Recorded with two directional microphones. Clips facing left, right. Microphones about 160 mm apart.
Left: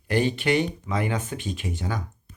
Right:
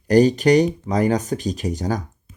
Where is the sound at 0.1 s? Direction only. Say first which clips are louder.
Right 9 dB; 40° right (ahead or behind).